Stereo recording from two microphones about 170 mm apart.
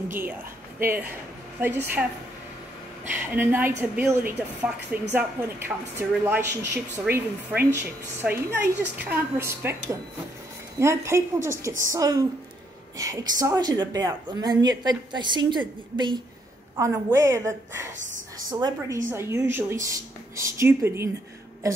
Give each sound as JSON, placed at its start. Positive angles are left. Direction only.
{"t": 0.2, "sound": "a woman's voice", "side_deg": -10}
{"t": 3.1, "sound": "a woman's voice", "side_deg": -10}
{"t": 16.7, "sound": "a woman's voice", "side_deg": -15}